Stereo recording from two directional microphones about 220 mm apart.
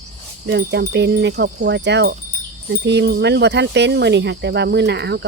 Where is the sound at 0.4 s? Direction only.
50° right (ahead or behind).